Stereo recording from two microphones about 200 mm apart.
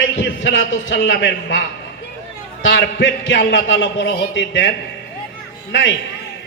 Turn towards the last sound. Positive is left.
turn(degrees=65)  # may be behind; listen again after turning